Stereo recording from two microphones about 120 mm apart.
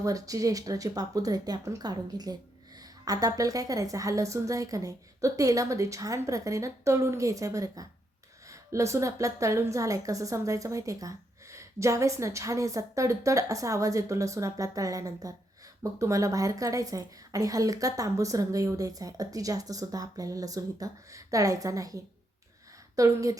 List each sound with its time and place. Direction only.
0.0 s a woman's voice: 30° right (ahead or behind)